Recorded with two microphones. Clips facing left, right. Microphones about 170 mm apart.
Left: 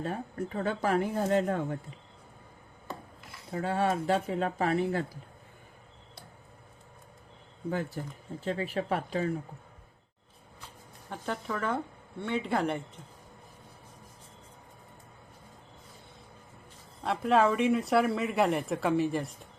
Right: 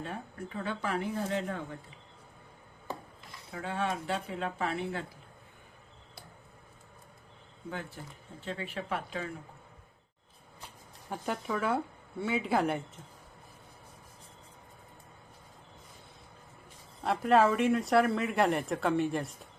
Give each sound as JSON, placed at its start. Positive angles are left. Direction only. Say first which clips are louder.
{"t": 0.0, "sound": "speech", "louder": "left 6 dB", "side_deg": 45}
{"t": 3.5, "sound": "speech", "louder": "left 5 dB", "side_deg": 40}
{"t": 7.7, "sound": "speech", "louder": "left 7 dB", "side_deg": 40}
{"t": 11.1, "sound": "speech", "louder": "right 1 dB", "side_deg": -10}
{"t": 17.0, "sound": "speech", "louder": "even", "side_deg": 0}